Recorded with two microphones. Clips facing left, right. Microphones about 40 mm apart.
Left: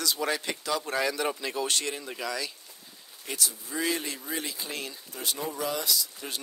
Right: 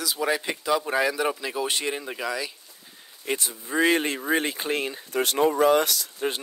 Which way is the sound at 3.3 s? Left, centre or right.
Right.